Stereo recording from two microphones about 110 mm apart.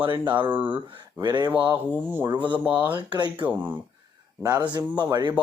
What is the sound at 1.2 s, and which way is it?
Speech, 40° right (ahead or behind).